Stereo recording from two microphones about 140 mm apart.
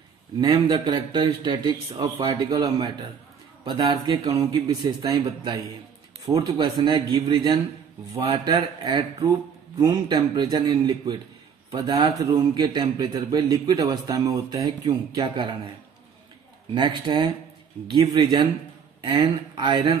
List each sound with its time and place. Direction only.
0.4 s speech: 35° right (ahead or behind)
1.9 s speech: 45° right (ahead or behind)
2.2 s a man's voice: 30° right (ahead or behind)
16.7 s speech: 35° right (ahead or behind)